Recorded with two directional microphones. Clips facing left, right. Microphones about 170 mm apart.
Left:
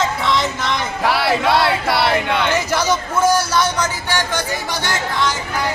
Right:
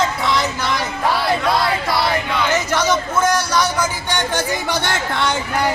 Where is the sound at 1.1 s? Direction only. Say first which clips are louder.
Left 2 dB; 70° left (ahead or behind).